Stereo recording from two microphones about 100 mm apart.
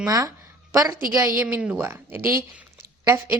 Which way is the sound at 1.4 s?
15° right (ahead or behind).